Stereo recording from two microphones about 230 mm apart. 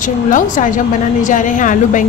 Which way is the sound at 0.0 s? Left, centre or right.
Left.